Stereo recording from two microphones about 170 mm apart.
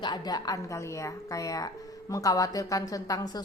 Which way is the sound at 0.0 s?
25° left (ahead or behind).